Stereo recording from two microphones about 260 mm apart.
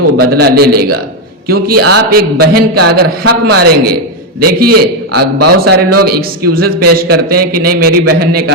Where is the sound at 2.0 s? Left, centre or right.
Right.